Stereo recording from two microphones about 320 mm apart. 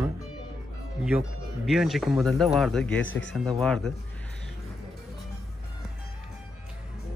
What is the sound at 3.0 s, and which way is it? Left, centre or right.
Speech, left.